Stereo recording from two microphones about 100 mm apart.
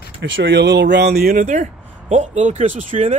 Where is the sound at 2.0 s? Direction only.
90° right.